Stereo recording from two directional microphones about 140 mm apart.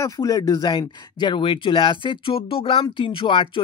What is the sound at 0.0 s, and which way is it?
Speech, 25° left (ahead or behind).